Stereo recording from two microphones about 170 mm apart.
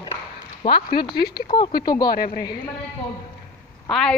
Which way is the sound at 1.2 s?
70° left (ahead or behind).